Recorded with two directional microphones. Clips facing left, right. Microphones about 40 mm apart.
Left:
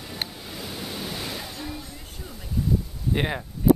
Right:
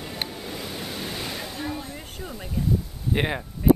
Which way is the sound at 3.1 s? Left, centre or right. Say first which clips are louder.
Right 1 dB; centre.